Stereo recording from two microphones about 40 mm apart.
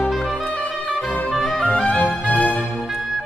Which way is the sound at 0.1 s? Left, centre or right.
Centre.